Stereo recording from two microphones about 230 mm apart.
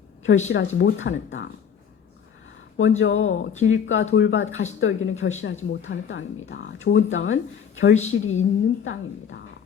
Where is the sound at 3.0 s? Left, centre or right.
Left.